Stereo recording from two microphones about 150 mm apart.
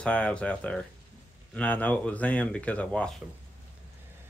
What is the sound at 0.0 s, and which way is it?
Speech, 10° left (ahead or behind).